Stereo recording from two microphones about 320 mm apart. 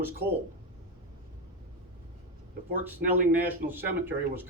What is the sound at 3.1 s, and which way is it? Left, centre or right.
Speech, centre.